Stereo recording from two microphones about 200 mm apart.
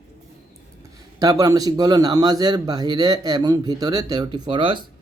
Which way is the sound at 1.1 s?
20° right (ahead or behind).